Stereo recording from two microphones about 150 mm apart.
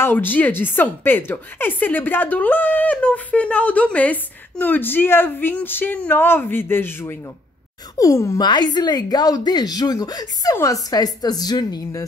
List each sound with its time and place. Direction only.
0.0 s a woman's voice: 15° left (ahead or behind)